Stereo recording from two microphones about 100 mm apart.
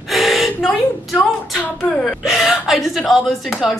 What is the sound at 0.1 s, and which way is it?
Gasp, centre (ahead or behind).